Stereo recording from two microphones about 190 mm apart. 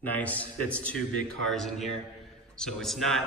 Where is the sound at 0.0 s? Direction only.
10° left (ahead or behind).